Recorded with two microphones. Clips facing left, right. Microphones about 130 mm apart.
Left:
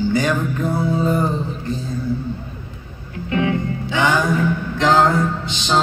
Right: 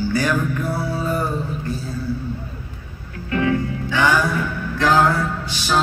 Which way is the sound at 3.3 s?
20° left (ahead or behind).